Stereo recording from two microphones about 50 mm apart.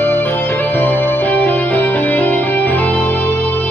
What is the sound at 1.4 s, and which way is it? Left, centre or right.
Music, left.